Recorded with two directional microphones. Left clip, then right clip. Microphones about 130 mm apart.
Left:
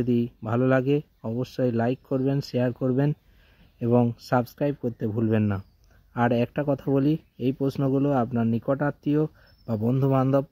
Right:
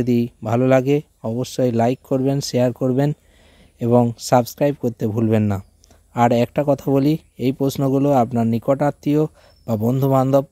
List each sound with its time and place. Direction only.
0.0 s speech: 30° right (ahead or behind)
5.4 s speech: 20° right (ahead or behind)